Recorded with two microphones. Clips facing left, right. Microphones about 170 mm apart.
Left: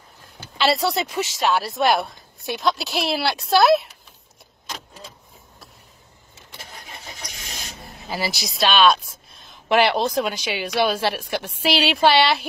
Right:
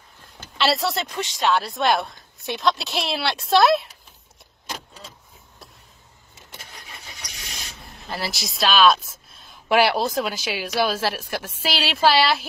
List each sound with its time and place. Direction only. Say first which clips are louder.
0.4 s speech: left 2 dB; centre (ahead or behind)
6.6 s vehicle: left 5 dB; 35° left (ahead or behind)
7.8 s speech: left 3 dB; centre (ahead or behind)